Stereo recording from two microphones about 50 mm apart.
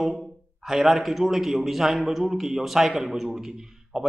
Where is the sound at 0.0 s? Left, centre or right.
Centre.